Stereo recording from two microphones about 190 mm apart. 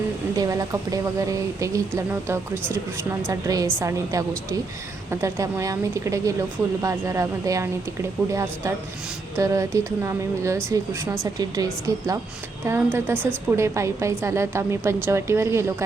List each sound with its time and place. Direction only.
0.3 s speech: 15° right (ahead or behind)